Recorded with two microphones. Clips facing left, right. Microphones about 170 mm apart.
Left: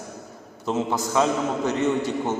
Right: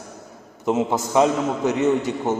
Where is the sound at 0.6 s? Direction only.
20° right (ahead or behind).